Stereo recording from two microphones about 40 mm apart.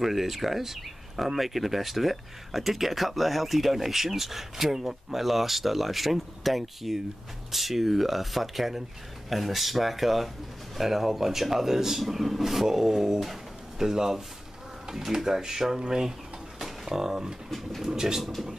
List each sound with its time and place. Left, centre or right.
0.0 s speech: centre
17.5 s speech: centre
17.8 s speech: centre